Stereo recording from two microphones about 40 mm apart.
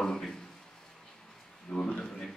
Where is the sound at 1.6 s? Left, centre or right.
Left.